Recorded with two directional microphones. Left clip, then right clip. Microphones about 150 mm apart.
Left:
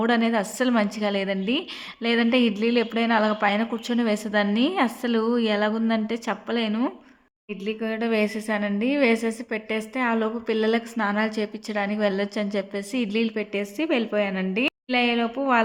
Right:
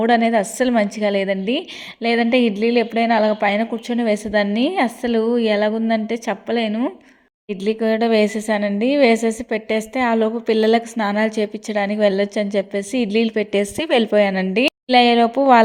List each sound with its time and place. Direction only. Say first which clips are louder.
0.0 s a woman's voice: right 7 dB; 20° right (ahead or behind)
7.5 s a woman's voice: right 10 dB; 40° right (ahead or behind)